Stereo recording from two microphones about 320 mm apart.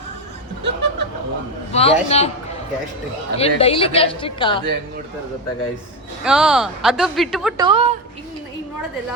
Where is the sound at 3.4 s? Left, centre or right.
Centre.